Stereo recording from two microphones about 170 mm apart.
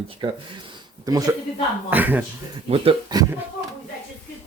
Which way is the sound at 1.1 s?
20° right (ahead or behind).